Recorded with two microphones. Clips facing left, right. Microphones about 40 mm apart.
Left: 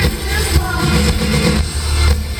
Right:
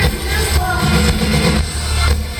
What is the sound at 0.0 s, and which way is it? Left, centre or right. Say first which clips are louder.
Music: right 1 dB; centre.